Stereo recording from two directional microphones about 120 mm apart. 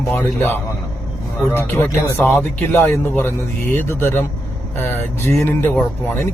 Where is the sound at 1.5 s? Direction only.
15° left (ahead or behind).